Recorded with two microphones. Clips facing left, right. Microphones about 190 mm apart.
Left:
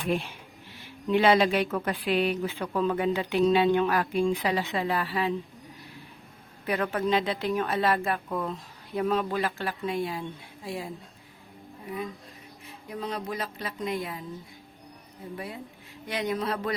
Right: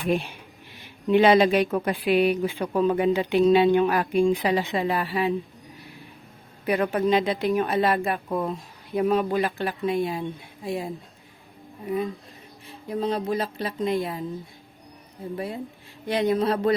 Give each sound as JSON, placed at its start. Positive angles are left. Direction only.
{"t": 0.1, "sound": "speech", "side_deg": -15}
{"t": 6.7, "sound": "a woman's voice", "side_deg": -15}
{"t": 12.6, "sound": "speech", "side_deg": -30}
{"t": 15.4, "sound": "speech", "side_deg": -30}